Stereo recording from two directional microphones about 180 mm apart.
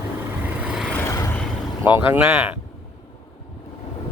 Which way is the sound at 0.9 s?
15° left (ahead or behind).